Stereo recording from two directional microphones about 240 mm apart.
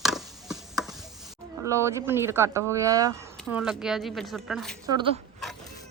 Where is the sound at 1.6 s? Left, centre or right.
Centre.